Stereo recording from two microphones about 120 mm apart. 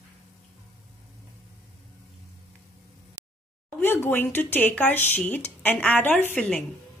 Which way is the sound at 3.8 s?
15° left (ahead or behind).